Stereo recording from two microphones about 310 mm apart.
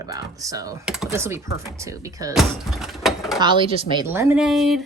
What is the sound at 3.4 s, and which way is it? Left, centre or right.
Speech, centre.